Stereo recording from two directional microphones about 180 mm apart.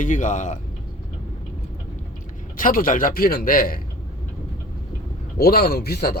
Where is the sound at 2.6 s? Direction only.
50° left (ahead or behind).